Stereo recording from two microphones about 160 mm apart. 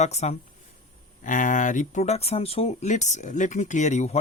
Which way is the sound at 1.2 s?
55° left (ahead or behind).